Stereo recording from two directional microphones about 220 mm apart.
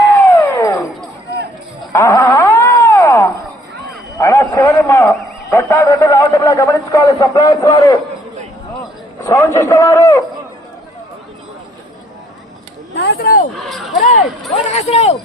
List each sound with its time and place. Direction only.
0.3 s music: 10° left (ahead or behind)
1.9 s a sound: 15° left (ahead or behind)
9.2 s a man's voice: 10° left (ahead or behind)
13.0 s speech: 45° left (ahead or behind)
13.7 s speech: centre (ahead or behind)
14.0 s speech: 35° left (ahead or behind)